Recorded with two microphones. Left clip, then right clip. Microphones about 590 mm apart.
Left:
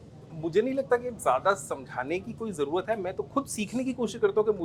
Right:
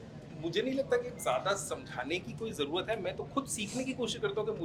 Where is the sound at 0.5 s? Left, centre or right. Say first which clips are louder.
Left 6 dB; left.